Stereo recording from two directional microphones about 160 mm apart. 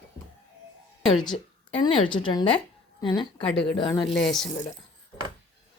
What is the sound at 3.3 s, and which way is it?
A woman's voice, 10° left (ahead or behind).